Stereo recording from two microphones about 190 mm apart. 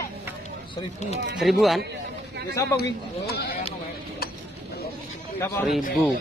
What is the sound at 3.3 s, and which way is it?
Speech, 60° left (ahead or behind).